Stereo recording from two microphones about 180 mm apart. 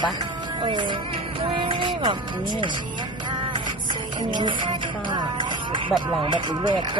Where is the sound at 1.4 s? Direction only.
30° right (ahead or behind).